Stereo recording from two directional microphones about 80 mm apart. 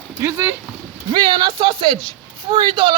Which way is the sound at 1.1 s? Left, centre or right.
Right.